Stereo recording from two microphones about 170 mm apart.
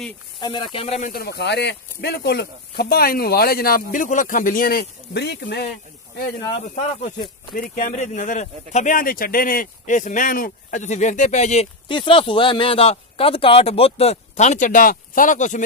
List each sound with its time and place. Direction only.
0.4 s speech: 25° left (ahead or behind)
1.0 s speech: 65° left (ahead or behind); by 5.7 s 80° left
7.5 s speech: 55° left (ahead or behind)
11.9 s speech: 30° left (ahead or behind); by 15.6 s 45° left (ahead or behind)